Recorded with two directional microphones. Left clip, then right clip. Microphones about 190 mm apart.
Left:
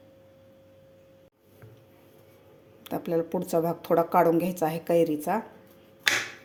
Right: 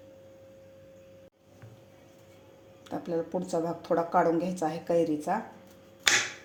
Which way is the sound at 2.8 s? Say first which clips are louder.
Left 4 dB; 40° left (ahead or behind).